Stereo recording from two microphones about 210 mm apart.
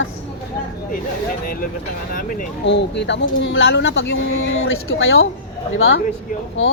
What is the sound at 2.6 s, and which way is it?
Speech, 55° left (ahead or behind).